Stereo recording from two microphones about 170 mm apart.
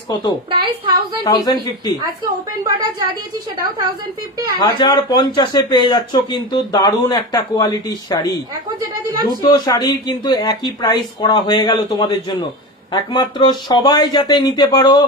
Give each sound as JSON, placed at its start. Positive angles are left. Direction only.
{"t": 0.5, "sound": "a woman's voice", "side_deg": -30}
{"t": 1.2, "sound": "speech", "side_deg": 25}
{"t": 2.2, "sound": "a woman's voice", "side_deg": -25}
{"t": 4.6, "sound": "speech", "side_deg": 25}
{"t": 9.5, "sound": "speech", "side_deg": 20}